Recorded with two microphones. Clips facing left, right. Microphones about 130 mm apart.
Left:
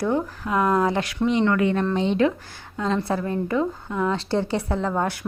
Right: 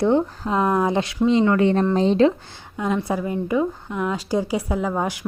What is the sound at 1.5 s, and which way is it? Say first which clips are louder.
A woman's voice: right 3 dB; 30° right (ahead or behind).